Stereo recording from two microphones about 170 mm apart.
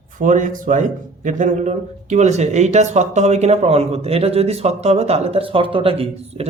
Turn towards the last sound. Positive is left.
turn(degrees=-35)  # may be behind; listen again after turning